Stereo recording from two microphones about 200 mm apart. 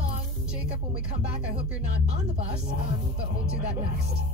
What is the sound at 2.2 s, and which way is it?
Speech, 30° right (ahead or behind).